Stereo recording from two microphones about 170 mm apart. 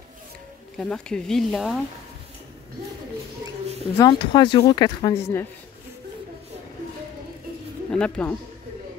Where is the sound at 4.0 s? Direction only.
25° left (ahead or behind).